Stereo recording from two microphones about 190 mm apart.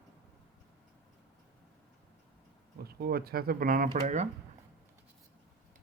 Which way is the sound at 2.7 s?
55° right (ahead or behind).